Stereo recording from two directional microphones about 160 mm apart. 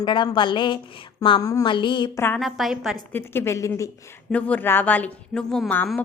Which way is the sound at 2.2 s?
15° left (ahead or behind).